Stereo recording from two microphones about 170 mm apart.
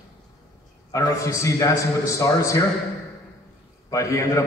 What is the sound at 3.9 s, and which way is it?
Speech, 20° left (ahead or behind).